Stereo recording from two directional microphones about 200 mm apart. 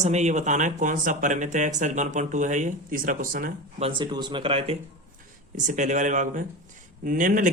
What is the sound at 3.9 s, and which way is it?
Speech, 25° right (ahead or behind).